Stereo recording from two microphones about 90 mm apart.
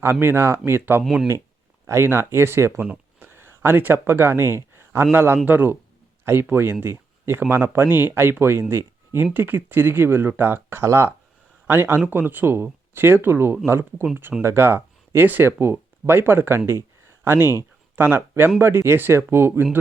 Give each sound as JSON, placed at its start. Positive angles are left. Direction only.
{"t": 0.0, "sound": "speech", "side_deg": -25}
{"t": 1.0, "sound": "speech", "side_deg": -5}
{"t": 1.9, "sound": "speech", "side_deg": -25}
{"t": 3.2, "sound": "a sound", "side_deg": -25}
{"t": 5.1, "sound": "speech", "side_deg": -25}
{"t": 17.4, "sound": "speech", "side_deg": 45}
{"t": 17.9, "sound": "speech", "side_deg": -25}